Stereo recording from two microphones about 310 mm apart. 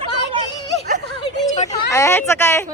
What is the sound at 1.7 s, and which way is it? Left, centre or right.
Speech, centre.